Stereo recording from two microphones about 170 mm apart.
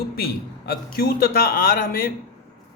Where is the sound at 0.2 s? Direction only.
65° left (ahead or behind).